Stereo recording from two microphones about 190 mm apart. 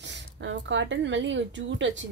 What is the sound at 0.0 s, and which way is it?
A woman's voice, 70° right (ahead or behind).